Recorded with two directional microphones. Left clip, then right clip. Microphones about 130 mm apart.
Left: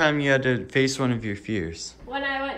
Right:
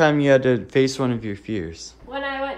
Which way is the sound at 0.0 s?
50° right (ahead or behind).